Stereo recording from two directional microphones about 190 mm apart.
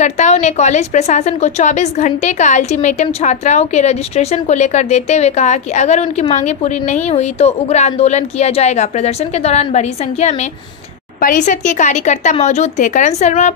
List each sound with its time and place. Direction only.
0.0 s a woman's voice: 35° left (ahead or behind)